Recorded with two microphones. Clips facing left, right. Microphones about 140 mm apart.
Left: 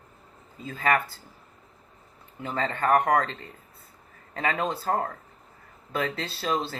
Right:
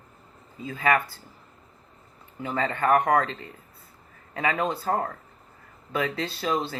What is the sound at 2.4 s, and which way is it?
Speech, 40° left (ahead or behind).